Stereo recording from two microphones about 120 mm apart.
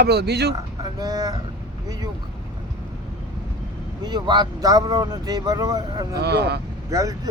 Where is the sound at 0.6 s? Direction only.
30° right (ahead or behind).